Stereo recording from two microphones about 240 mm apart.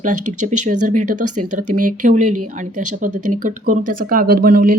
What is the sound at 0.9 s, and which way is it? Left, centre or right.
Speech, right.